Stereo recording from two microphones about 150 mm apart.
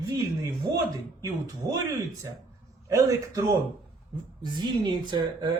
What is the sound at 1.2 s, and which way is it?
Speech, 25° right (ahead or behind).